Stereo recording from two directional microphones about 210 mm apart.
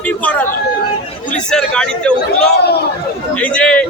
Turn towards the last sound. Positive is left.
turn(degrees=5)  # may be behind; listen again after turning